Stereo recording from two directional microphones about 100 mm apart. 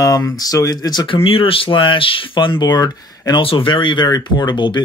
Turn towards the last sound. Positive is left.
turn(degrees=50)  # may be behind; listen again after turning